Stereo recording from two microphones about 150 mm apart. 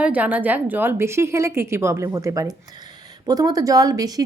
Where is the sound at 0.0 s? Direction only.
10° right (ahead or behind).